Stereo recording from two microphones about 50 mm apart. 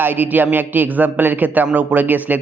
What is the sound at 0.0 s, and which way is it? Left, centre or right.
A man's voice, right.